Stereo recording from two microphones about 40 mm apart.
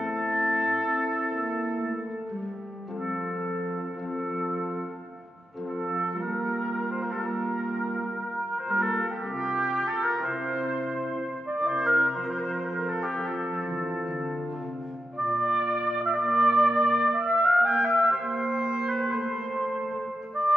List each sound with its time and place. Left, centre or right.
0.0 s music: centre
5.9 s trumpet: centre
9.5 s music: centre
10.5 s brass instrument: centre
11.5 s trumpet: centre
12.8 s music: centre
15.1 s trumpet: centre
17.6 s music: centre